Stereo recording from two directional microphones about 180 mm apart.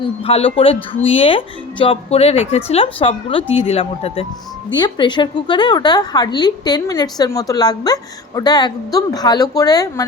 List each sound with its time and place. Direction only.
0.0 s a woman's voice: 30° left (ahead or behind)